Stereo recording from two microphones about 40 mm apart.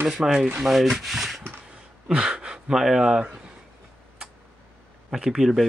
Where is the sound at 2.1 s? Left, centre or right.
Right.